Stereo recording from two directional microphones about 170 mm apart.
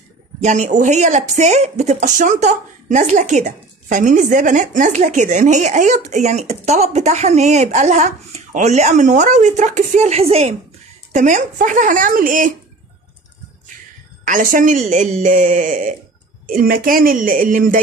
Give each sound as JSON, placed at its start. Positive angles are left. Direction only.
{"t": 0.4, "sound": "speech", "side_deg": -45}
{"t": 14.2, "sound": "speech", "side_deg": -50}